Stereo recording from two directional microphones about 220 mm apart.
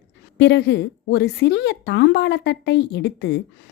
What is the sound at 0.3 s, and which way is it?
A woman's voice, 50° left (ahead or behind).